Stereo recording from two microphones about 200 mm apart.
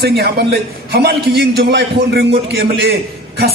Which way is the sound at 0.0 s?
55° right (ahead or behind).